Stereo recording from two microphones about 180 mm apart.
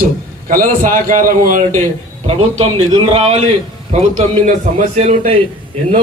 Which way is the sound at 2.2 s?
35° right (ahead or behind).